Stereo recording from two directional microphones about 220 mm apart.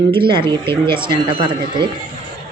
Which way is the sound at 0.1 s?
20° right (ahead or behind).